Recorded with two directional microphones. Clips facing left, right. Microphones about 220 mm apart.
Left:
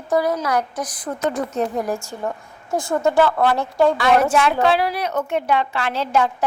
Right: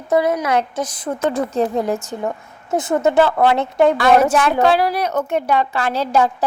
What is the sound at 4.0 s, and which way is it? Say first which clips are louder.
A woman's voice: right 3 dB; 45° right (ahead or behind).